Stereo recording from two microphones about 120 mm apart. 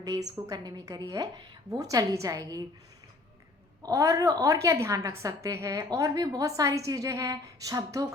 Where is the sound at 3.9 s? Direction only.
25° right (ahead or behind).